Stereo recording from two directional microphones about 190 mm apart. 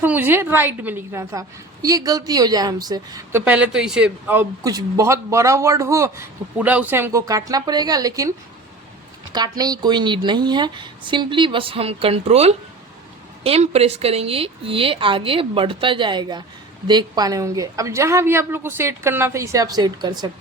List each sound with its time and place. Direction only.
0.0 s a man's voice: 10° right (ahead or behind)
3.4 s a man's voice: 5° right (ahead or behind)
9.3 s a woman's voice: 20° right (ahead or behind)